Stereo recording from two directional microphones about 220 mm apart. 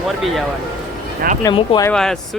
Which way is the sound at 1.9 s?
5° left (ahead or behind).